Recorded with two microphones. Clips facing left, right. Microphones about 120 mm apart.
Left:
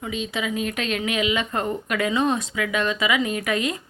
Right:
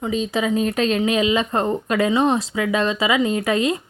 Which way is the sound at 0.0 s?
35° right (ahead or behind).